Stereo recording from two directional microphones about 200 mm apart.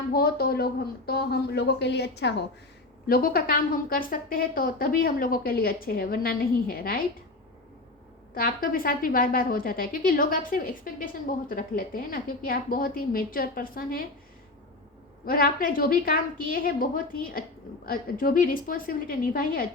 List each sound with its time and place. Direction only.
0.1 s a woman's voice: 50° left (ahead or behind)
3.1 s a woman's voice: 45° left (ahead or behind)
8.4 s a woman's voice: 45° left (ahead or behind)
15.3 s a woman's voice: 45° left (ahead or behind)